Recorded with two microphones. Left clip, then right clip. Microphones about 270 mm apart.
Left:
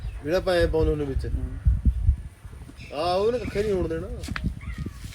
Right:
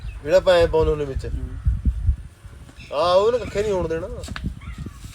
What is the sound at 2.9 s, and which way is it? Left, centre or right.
Speech, centre.